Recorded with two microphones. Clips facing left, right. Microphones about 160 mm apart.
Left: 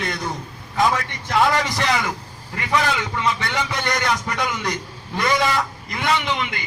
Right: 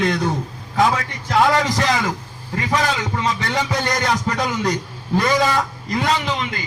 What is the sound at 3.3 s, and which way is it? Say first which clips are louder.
Music: right 3 dB; 35° right (ahead or behind).